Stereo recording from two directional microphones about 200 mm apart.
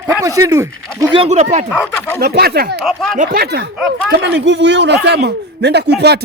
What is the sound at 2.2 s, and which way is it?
Speech, 55° right (ahead or behind).